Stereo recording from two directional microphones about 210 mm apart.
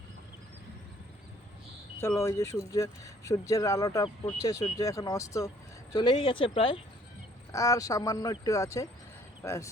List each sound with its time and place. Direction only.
2.0 s speech: 15° left (ahead or behind)